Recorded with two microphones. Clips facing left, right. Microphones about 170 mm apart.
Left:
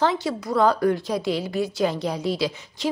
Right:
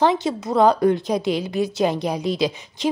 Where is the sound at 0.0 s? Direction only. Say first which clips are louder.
Right 4 dB; 20° right (ahead or behind).